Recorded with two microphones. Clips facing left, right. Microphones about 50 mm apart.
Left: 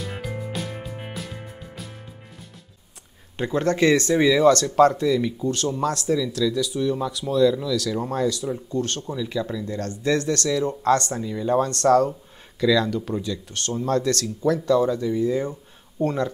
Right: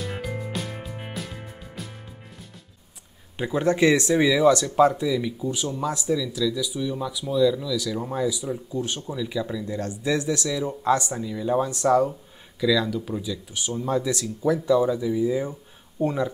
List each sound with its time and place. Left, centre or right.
0.0 s music: centre
3.3 s speech: centre
3.6 s speech: centre
6.0 s speech: centre
6.5 s speech: centre
9.7 s speech: centre
11.2 s speech: centre
11.8 s speech: centre
12.1 s speech: centre